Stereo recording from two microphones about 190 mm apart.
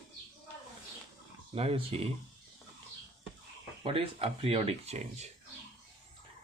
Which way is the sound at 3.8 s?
30° right (ahead or behind).